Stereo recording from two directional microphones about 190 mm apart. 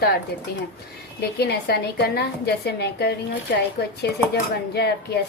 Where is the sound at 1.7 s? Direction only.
55° left (ahead or behind).